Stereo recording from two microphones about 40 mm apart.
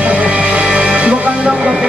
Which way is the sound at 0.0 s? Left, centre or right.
Right.